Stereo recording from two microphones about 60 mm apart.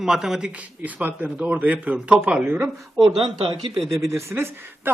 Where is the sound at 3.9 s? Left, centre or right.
Right.